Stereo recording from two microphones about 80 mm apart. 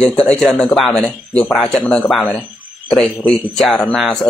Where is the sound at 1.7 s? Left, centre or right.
Centre.